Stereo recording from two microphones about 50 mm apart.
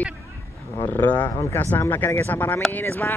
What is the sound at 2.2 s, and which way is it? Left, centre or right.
Speech, left.